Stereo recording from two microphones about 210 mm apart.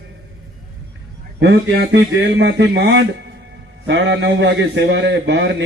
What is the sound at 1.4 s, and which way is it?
A man's voice, 55° right (ahead or behind).